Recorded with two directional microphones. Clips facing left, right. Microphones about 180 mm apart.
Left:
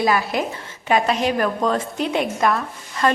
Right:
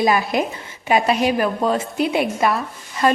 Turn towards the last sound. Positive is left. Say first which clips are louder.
# right 2 dB
turn(degrees=-10)  # may be behind; listen again after turning